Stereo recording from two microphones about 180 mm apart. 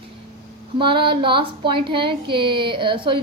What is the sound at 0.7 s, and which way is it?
A woman's voice, 25° right (ahead or behind).